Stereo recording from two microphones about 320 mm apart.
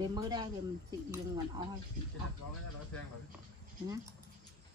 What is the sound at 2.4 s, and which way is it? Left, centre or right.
Speech, left.